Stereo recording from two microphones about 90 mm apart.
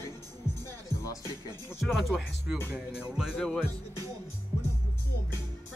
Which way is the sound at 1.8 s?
5° right (ahead or behind).